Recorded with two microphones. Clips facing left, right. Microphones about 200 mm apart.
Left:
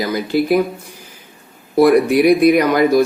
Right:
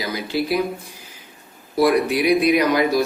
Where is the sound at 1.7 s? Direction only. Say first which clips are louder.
Left 6 dB; 50° left (ahead or behind).